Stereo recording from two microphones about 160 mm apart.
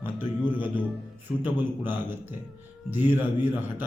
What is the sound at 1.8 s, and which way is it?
Speech, 10° right (ahead or behind).